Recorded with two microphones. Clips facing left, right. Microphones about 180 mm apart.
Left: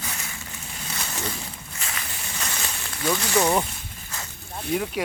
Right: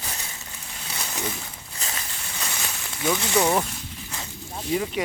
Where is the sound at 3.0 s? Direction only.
20° right (ahead or behind).